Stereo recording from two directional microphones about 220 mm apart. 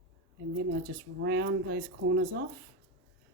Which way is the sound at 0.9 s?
50° right (ahead or behind).